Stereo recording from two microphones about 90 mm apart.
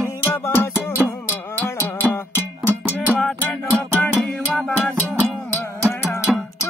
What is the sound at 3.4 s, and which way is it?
Music, 20° left (ahead or behind).